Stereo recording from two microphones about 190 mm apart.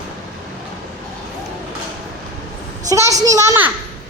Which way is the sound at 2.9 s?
15° right (ahead or behind).